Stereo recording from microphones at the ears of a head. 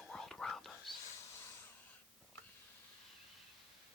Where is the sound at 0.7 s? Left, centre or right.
Left.